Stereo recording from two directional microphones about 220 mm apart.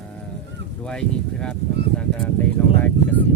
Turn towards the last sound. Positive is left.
turn(degrees=10)  # may be behind; listen again after turning